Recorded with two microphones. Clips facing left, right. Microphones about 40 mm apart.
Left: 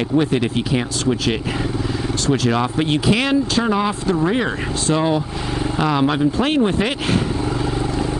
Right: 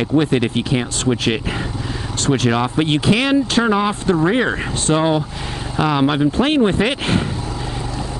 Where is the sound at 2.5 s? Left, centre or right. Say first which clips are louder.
Right 1 dB; centre.